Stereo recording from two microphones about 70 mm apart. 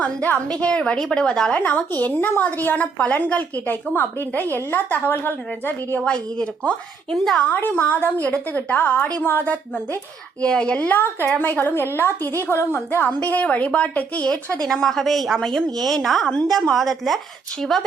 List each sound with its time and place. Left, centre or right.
0.0 s a woman's voice: centre
6.0 s a woman's voice: centre
7.1 s a woman's voice: centre
7.4 s a woman's voice: left
10.4 s a woman's voice: centre; by 13.1 s left
13.1 s a woman's voice: left
14.7 s a woman's voice: centre